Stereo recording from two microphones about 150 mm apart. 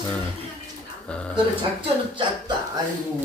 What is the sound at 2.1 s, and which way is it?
Speech, 35° right (ahead or behind).